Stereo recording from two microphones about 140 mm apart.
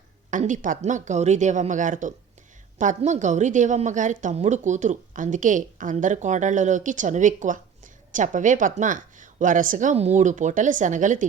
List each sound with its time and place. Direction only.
0.3 s a woman's voice: 65° right (ahead or behind)